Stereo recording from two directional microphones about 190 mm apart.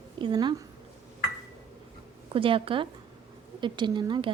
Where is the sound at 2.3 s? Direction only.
30° right (ahead or behind).